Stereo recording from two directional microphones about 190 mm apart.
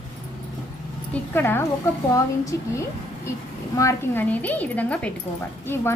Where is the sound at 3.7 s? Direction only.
15° left (ahead or behind).